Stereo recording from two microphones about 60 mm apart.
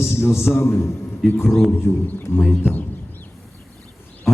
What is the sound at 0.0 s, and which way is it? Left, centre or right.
Speech, left.